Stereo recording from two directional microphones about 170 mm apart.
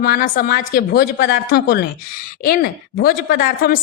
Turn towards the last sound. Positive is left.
turn(degrees=60)  # may be behind; listen again after turning